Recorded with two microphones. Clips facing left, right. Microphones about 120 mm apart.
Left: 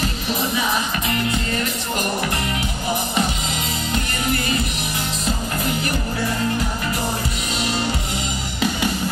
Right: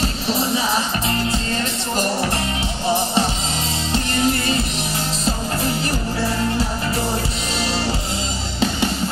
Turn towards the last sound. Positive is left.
turn(degrees=-30)  # may be behind; listen again after turning